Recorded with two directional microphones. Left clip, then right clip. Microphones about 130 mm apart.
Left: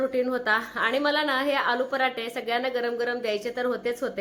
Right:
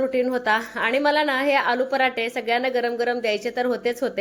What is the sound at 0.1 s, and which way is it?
A woman's voice, 30° right (ahead or behind).